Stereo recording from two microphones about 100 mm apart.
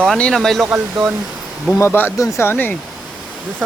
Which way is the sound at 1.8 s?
25° left (ahead or behind).